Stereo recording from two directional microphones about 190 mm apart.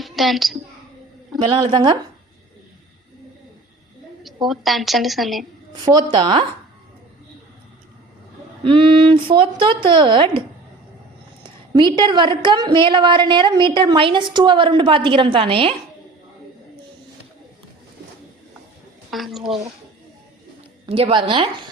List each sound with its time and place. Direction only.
0.0 s a woman's voice: centre (ahead or behind)
1.5 s a woman's voice: 25° right (ahead or behind)
4.4 s a woman's voice: centre (ahead or behind)
5.7 s a woman's voice: 20° right (ahead or behind)
8.6 s a woman's voice: 25° right (ahead or behind)
11.4 s a sound: 25° right (ahead or behind)
11.9 s a woman's voice: 25° right (ahead or behind)
19.1 s a woman's voice: centre (ahead or behind)
20.8 s a woman's voice: 30° right (ahead or behind)